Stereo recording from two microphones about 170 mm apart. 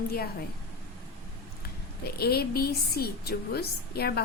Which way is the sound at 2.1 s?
65° left (ahead or behind).